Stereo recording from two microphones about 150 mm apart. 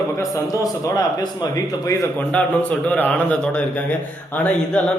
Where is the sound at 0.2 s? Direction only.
25° left (ahead or behind).